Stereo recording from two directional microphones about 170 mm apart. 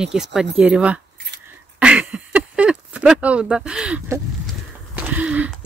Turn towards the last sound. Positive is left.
turn(degrees=-10)  # may be behind; listen again after turning